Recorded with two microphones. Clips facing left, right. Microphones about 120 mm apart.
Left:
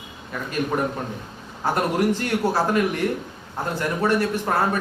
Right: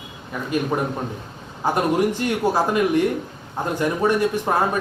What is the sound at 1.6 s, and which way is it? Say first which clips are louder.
Speech: right 2 dB; 15° right (ahead or behind).